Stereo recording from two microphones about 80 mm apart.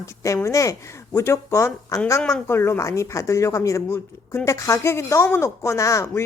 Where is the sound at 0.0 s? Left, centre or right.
Left.